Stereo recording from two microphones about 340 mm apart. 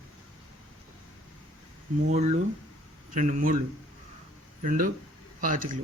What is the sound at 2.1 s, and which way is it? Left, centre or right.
Speech, centre.